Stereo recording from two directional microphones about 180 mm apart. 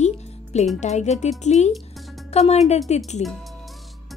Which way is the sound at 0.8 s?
40° left (ahead or behind).